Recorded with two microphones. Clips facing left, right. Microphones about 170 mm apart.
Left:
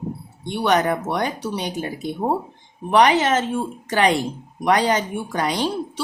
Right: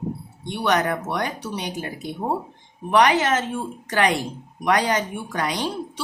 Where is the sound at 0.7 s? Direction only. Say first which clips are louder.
Left 2 dB; 30° left (ahead or behind).